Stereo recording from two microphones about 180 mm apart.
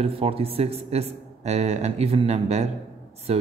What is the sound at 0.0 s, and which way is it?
Speech, 35° right (ahead or behind).